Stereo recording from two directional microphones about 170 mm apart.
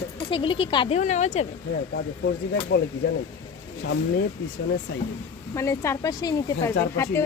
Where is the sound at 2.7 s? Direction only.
80° left.